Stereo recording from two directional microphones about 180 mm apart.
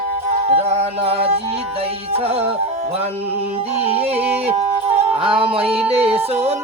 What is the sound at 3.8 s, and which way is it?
Yodeling, 35° right (ahead or behind).